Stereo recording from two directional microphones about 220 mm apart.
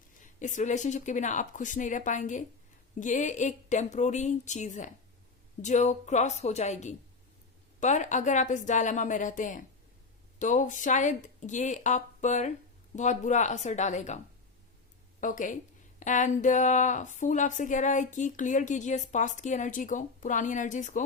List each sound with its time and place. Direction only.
0.3 s speech: 35° left (ahead or behind)
15.2 s speech: 35° left (ahead or behind)